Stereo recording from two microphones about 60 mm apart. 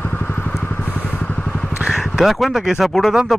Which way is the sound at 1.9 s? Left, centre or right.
Centre.